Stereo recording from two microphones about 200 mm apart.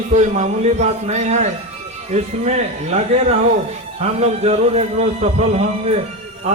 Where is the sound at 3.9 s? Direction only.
30° right (ahead or behind).